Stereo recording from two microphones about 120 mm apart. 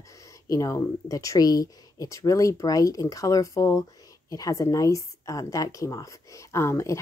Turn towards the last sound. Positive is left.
turn(degrees=25)  # may be behind; listen again after turning